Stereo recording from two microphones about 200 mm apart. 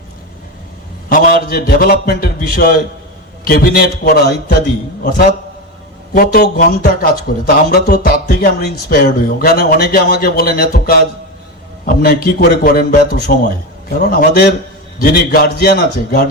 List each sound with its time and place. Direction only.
1.1 s speech: 45° left (ahead or behind)
6.1 s speech: 45° left (ahead or behind)